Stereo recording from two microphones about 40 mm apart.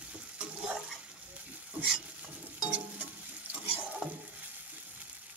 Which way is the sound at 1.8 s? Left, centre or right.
Right.